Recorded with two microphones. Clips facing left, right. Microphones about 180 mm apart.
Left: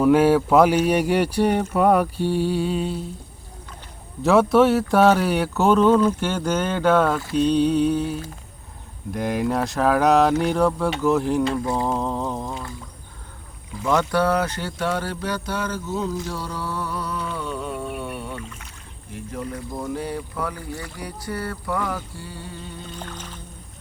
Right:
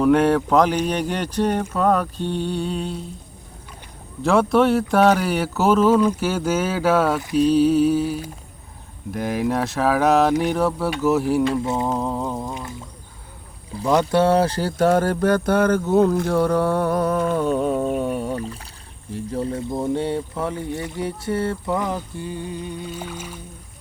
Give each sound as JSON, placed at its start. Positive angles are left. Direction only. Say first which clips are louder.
{"t": 0.0, "sound": "speech", "louder": "even", "side_deg": 5}
{"t": 4.2, "sound": "speech", "louder": "left 1 dB", "side_deg": 0}
{"t": 11.6, "sound": "speech", "louder": "right 1 dB", "side_deg": -20}
{"t": 11.9, "sound": "speech", "louder": "right 1 dB", "side_deg": -5}
{"t": 14.0, "sound": "a sound", "louder": "right 4 dB", "side_deg": -25}
{"t": 19.1, "sound": "speech", "louder": "right 6 dB", "side_deg": -30}
{"t": 22.9, "sound": "music", "louder": "right 4 dB", "side_deg": -10}